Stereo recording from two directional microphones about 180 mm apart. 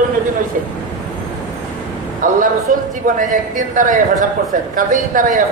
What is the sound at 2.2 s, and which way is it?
A man's voice, 50° right (ahead or behind).